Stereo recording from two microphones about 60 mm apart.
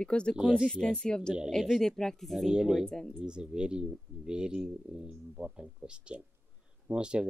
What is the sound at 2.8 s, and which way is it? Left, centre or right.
Speech, centre.